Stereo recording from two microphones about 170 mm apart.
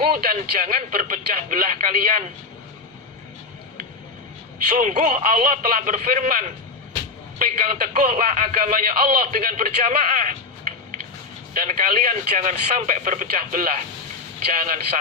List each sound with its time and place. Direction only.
0.1 s speech: 60° right (ahead or behind)
0.3 s a man's voice: 45° right (ahead or behind)
4.8 s a man's voice: 45° right (ahead or behind)